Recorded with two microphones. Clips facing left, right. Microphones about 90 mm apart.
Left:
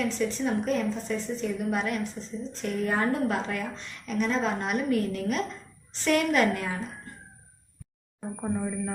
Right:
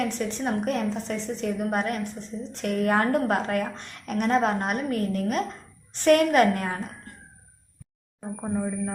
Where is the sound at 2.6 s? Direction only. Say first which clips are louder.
Right 4 dB; 65° right (ahead or behind); by 6.8 s 50° right (ahead or behind).